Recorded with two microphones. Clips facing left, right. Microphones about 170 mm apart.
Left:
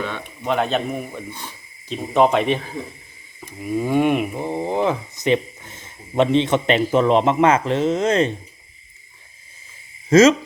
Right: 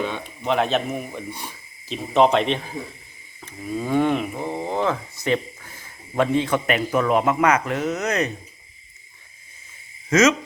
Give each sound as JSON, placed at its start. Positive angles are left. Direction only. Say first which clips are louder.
{"t": 0.4, "sound": "a man's voice", "louder": "left 1 dB", "side_deg": 0}
{"t": 10.1, "sound": "speech", "louder": "left 5 dB", "side_deg": 30}